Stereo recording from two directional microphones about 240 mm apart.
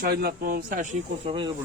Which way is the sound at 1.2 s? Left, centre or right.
Right.